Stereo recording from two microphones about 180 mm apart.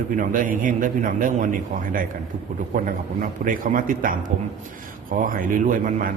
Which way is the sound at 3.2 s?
50° right (ahead or behind).